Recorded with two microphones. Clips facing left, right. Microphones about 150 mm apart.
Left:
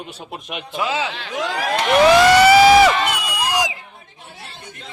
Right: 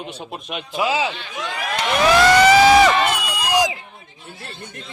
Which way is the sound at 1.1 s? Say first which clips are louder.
Left 5 dB; 90° left.